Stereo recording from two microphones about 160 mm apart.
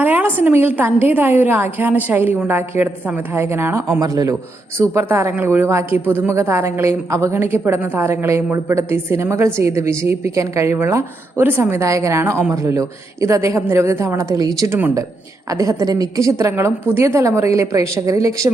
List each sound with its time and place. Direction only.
0.0 s a woman's voice: 10° right (ahead or behind)